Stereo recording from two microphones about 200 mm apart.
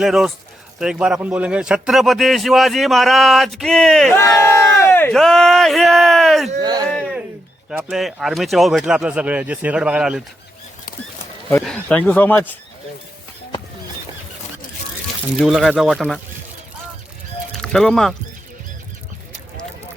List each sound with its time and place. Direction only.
0.0 s a man's voice: centre (ahead or behind)
4.2 s speech: 15° left (ahead or behind)
6.6 s a sound: 20° right (ahead or behind)
6.9 s a sound: centre (ahead or behind)
7.7 s a man's voice: 5° right (ahead or behind)
11.4 s speech: 5° left (ahead or behind)
15.4 s a man's voice: centre (ahead or behind)
17.5 s bird: 5° left (ahead or behind)